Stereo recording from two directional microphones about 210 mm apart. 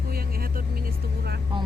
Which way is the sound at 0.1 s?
45° right (ahead or behind).